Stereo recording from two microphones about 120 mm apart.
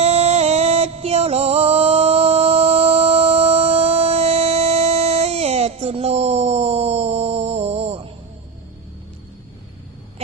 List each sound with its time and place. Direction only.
0.0 s music: 60° right (ahead or behind)